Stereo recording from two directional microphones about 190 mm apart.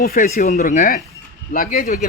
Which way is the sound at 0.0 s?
50° left (ahead or behind).